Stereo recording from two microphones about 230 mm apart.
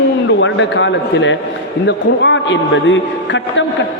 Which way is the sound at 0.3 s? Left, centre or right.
Left.